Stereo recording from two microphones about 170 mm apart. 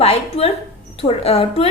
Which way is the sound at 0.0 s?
35° left (ahead or behind).